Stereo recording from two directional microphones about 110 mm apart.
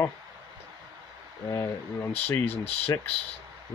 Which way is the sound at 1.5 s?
25° left (ahead or behind).